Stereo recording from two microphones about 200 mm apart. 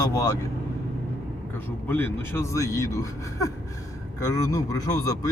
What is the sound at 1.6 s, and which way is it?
Speech, 10° left (ahead or behind).